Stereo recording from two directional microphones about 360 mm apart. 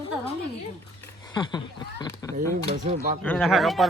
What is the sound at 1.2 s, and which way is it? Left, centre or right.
Speech, centre.